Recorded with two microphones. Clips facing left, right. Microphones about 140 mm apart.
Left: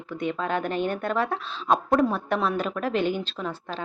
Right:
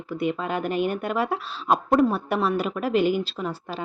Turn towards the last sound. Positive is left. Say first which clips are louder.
# right 2 dB
turn(degrees=-10)  # may be behind; listen again after turning